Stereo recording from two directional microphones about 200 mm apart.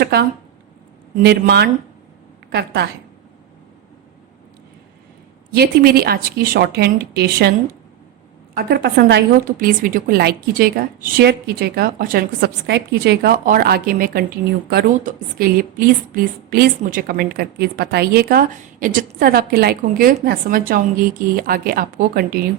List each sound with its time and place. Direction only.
0.0 s a sound: 50° right (ahead or behind)
1.2 s speech: 55° right (ahead or behind)
5.5 s a woman's voice: 50° right (ahead or behind)